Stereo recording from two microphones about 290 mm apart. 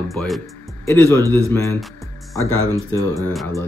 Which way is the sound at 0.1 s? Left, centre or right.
Centre.